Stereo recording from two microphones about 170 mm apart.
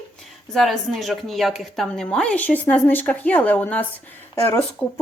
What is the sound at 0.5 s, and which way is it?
Speech, centre (ahead or behind).